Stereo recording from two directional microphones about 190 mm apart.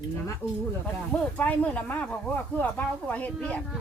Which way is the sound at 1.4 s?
10° left (ahead or behind).